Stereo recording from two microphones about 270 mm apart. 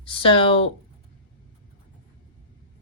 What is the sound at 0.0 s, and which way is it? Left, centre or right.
Speech, centre.